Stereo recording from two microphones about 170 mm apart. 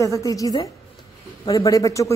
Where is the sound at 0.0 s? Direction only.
20° left (ahead or behind).